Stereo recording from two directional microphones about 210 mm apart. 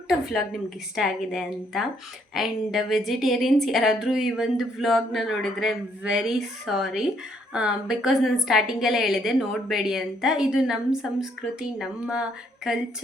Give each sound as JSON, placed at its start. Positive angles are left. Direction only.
{"t": 0.1, "sound": "a woman's voice", "side_deg": 0}